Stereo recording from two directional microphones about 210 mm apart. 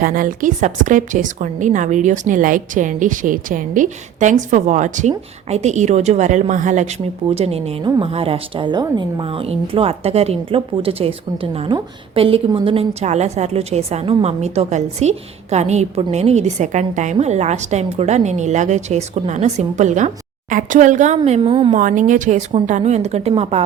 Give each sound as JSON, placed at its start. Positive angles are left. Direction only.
{"t": 0.0, "sound": "a woman's voice", "side_deg": -40}
{"t": 21.7, "sound": "a woman's voice", "side_deg": -40}